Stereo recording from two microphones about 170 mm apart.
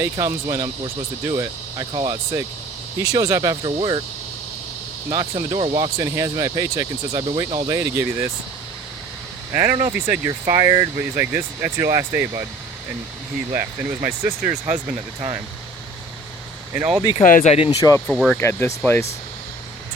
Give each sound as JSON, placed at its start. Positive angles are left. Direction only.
{"t": 0.0, "sound": "speech", "side_deg": -15}
{"t": 5.1, "sound": "speech", "side_deg": -25}
{"t": 9.5, "sound": "speech", "side_deg": -15}
{"t": 14.0, "sound": "speech", "side_deg": -10}
{"t": 17.0, "sound": "speech", "side_deg": 25}
{"t": 17.2, "sound": "speech", "side_deg": 55}
{"t": 17.7, "sound": "speech", "side_deg": 20}
{"t": 18.1, "sound": "speech", "side_deg": 0}
{"t": 18.3, "sound": "speech", "side_deg": 15}